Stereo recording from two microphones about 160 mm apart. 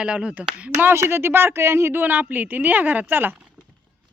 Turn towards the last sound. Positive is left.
turn(degrees=-10)  # may be behind; listen again after turning